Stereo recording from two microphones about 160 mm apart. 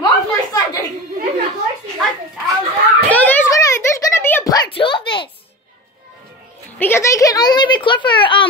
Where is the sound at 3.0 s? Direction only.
10° left (ahead or behind).